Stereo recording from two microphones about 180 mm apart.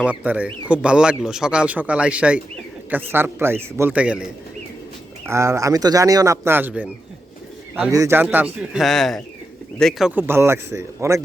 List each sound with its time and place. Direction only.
0.0 s speech: 10° right (ahead or behind)
5.3 s speech: 15° right (ahead or behind); by 10.1 s 5° left (ahead or behind)
10.1 s speech: 10° right (ahead or behind)